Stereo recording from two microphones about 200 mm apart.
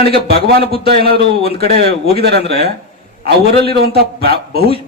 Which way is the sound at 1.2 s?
30° left (ahead or behind).